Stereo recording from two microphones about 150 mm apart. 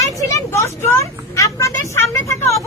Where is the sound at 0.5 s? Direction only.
20° left (ahead or behind).